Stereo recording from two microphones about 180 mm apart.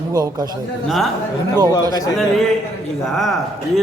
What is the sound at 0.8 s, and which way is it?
Speech, centre (ahead or behind).